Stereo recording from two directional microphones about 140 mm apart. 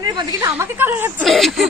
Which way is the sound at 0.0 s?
30° right (ahead or behind).